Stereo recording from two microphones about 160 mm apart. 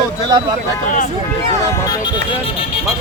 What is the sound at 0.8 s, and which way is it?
Speech, 50° left (ahead or behind).